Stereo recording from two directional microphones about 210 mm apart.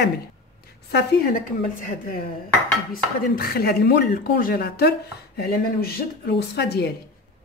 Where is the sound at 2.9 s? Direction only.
45° left (ahead or behind).